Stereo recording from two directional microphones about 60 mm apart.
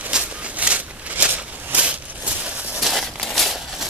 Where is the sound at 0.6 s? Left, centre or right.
Right.